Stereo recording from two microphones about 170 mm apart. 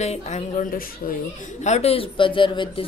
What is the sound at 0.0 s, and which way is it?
A woman's voice, 40° left (ahead or behind).